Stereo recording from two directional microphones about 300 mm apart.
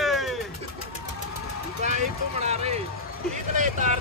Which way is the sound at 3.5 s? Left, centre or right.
Right.